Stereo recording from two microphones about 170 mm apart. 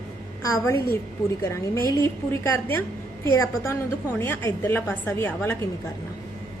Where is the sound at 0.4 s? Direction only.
15° left (ahead or behind).